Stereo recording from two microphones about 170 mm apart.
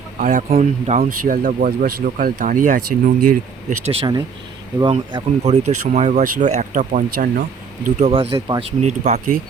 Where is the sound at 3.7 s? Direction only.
40° right (ahead or behind).